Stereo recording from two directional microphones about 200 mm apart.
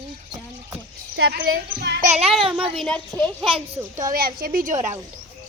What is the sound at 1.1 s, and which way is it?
Speech, 55° right (ahead or behind).